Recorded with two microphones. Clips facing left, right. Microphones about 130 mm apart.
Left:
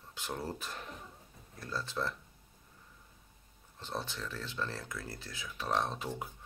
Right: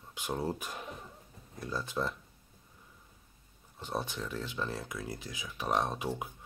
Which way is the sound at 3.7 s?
15° right (ahead or behind).